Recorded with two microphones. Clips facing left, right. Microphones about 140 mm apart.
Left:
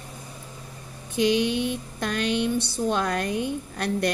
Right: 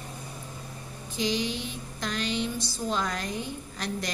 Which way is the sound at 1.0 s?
60° left (ahead or behind).